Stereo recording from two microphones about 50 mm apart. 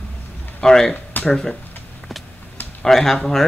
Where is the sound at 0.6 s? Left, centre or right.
Centre.